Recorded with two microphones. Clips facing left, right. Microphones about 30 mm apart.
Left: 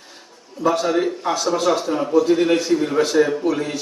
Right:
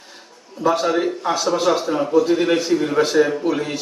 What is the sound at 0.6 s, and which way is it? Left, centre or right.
A man's voice, centre.